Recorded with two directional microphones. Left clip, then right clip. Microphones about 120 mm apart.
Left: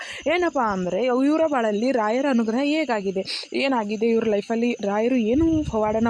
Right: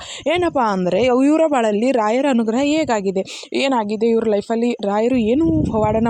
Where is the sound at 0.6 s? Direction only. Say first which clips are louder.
Right 6 dB; 65° right (ahead or behind); by 5.4 s 40° right (ahead or behind).